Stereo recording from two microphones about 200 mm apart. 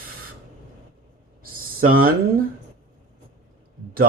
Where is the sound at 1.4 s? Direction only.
45° right (ahead or behind).